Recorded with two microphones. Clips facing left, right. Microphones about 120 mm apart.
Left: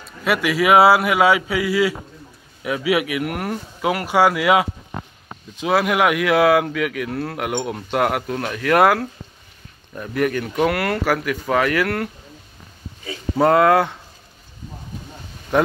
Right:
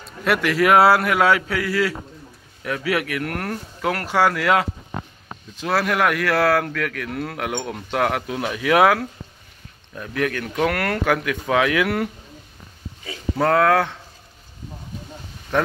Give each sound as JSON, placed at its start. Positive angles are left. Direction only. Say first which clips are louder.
{"t": 0.0, "sound": "speech", "louder": "even", "side_deg": 5}
{"t": 15.5, "sound": "speech", "louder": "left 4 dB", "side_deg": 10}